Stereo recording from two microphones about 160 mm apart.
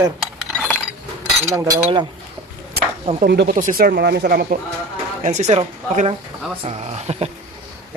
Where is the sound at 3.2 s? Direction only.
90° right.